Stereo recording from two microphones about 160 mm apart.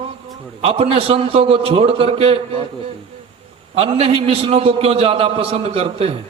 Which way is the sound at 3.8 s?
35° right (ahead or behind).